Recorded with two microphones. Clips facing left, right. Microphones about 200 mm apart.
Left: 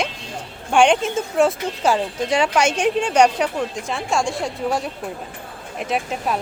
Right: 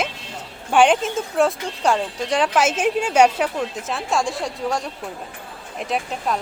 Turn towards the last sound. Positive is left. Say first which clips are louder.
# left 1 dB
turn(degrees=0)  # may be behind; listen again after turning